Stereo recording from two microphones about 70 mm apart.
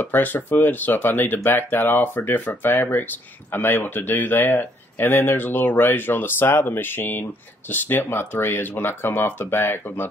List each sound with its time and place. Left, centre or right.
0.0 s speech: left